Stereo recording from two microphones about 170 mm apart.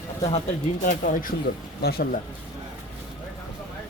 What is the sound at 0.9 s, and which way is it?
Speech, 55° left (ahead or behind).